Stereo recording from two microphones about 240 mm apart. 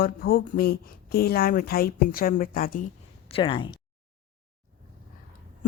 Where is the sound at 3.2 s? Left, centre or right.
Left.